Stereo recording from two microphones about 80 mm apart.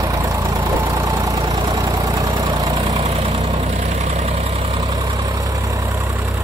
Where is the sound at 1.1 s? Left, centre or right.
Right.